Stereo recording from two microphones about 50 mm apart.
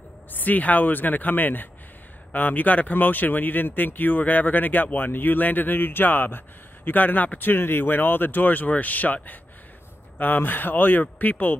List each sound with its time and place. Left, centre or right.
0.3 s speech: left